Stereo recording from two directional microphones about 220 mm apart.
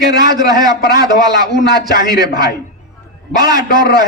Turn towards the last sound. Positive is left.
turn(degrees=-20)  # may be behind; listen again after turning